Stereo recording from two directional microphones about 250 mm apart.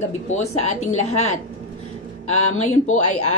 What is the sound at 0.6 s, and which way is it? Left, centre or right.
Speech, left.